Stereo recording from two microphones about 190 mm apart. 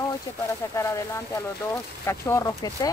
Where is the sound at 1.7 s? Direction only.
15° left (ahead or behind).